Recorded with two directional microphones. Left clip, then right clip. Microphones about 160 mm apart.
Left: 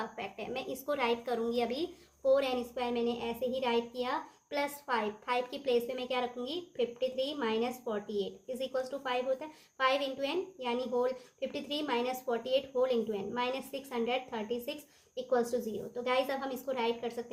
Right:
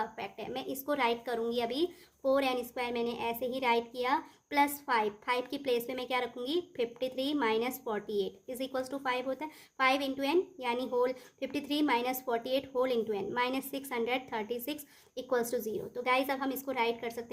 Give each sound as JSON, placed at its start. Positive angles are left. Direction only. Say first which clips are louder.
{"t": 0.0, "sound": "a woman's voice", "louder": "right 2 dB", "side_deg": -30}